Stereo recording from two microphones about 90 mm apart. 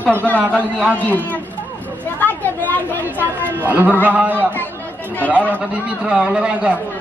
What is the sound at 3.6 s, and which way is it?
Speech, 20° right (ahead or behind).